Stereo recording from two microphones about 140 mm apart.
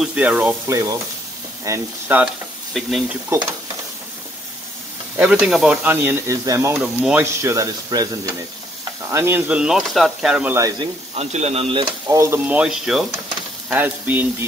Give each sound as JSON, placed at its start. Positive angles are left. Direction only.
{"t": 0.0, "sound": "speech", "side_deg": -10}
{"t": 0.7, "sound": "speech", "side_deg": -25}
{"t": 2.7, "sound": "sizzle", "side_deg": 0}
{"t": 5.2, "sound": "sizzle", "side_deg": -5}
{"t": 5.9, "sound": "speech", "side_deg": -15}
{"t": 6.8, "sound": "speech", "side_deg": -10}
{"t": 11.1, "sound": "speech", "side_deg": -50}
{"t": 12.1, "sound": "speech", "side_deg": -25}
{"t": 12.4, "sound": "sizzle", "side_deg": -5}
{"t": 13.7, "sound": "speech", "side_deg": -10}